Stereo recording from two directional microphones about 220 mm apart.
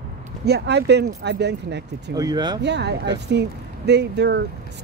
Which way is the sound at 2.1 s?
15° right (ahead or behind).